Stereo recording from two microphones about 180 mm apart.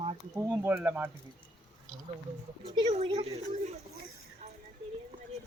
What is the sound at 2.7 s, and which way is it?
Speech, 35° right (ahead or behind).